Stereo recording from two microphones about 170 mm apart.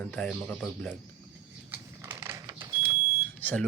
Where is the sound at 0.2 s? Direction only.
5° left (ahead or behind).